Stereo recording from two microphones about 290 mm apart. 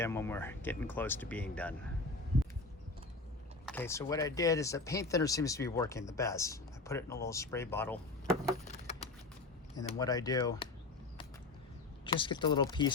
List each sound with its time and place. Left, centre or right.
0.0 s speech: centre
3.7 s speech: centre
9.7 s speech: centre
12.0 s speech: centre